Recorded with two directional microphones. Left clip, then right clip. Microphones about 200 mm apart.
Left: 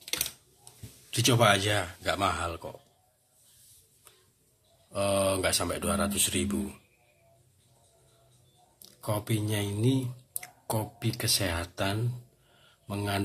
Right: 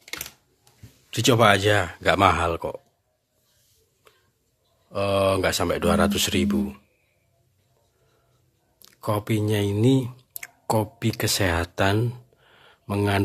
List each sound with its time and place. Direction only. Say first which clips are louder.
0.0 s typing: left 2 dB; 10° right (ahead or behind)
1.1 s speech: right 6 dB; 50° right (ahead or behind)
4.9 s speech: right 6 dB; 50° right (ahead or behind)
8.8 s speech: right 7 dB; 55° right (ahead or behind)